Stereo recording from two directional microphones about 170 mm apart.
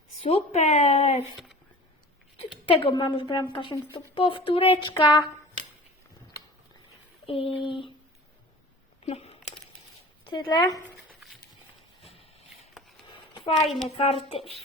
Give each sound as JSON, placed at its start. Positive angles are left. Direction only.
{"t": 0.2, "sound": "speech", "side_deg": 35}
{"t": 2.8, "sound": "a woman's voice", "side_deg": 25}
{"t": 7.3, "sound": "speech", "side_deg": 30}
{"t": 9.0, "sound": "a sound", "side_deg": 35}
{"t": 10.2, "sound": "a woman's voice", "side_deg": 30}
{"t": 13.1, "sound": "a sound", "side_deg": 30}
{"t": 13.7, "sound": "a child's voice", "side_deg": 0}
{"t": 13.9, "sound": "speech", "side_deg": 35}